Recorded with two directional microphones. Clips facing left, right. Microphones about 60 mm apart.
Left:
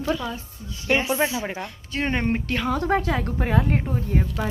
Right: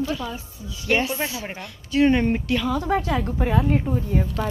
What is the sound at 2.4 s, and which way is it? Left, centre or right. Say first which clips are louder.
A woman's voice: right 1 dB; left.